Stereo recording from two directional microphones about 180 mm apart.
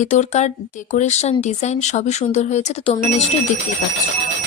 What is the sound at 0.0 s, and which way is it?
Speech, 40° left (ahead or behind).